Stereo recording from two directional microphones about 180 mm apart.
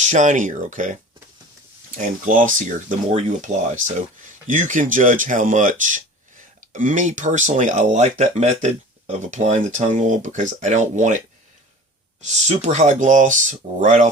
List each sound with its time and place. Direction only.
0.1 s speech: 45° right (ahead or behind)
2.0 s speech: 50° right (ahead or behind)
12.2 s speech: 40° right (ahead or behind)